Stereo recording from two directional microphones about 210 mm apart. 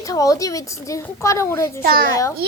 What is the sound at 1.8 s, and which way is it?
Speech, 45° right (ahead or behind).